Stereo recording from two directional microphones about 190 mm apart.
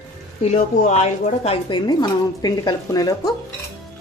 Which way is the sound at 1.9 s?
20° left (ahead or behind).